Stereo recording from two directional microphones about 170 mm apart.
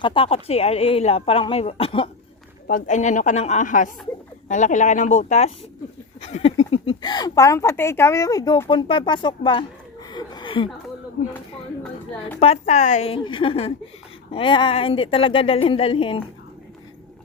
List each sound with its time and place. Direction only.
0.0 s speech: 30° left (ahead or behind)
2.6 s a woman's voice: 50° left (ahead or behind); by 8.7 s 20° left (ahead or behind)
8.7 s speech: 30° left (ahead or behind)
10.1 s a sound: 25° left (ahead or behind)
12.4 s speech: 40° left (ahead or behind)